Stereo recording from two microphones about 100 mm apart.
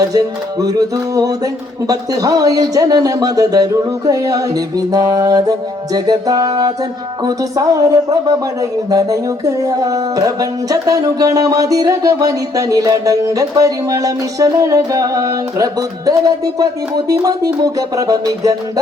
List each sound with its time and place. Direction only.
0.0 s music: 35° right (ahead or behind)